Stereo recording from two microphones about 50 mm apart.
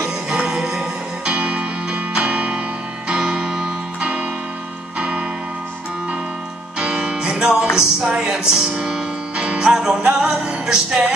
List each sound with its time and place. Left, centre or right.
0.5 s music: centre
6.8 s music: right